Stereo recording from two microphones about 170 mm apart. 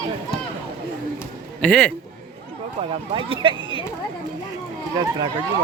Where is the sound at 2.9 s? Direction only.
30° right (ahead or behind).